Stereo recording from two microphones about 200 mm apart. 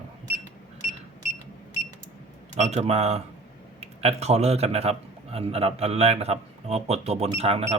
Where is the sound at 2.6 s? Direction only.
35° right (ahead or behind).